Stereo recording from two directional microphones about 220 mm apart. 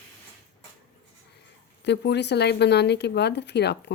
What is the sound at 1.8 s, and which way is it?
A woman's voice, 50° left (ahead or behind).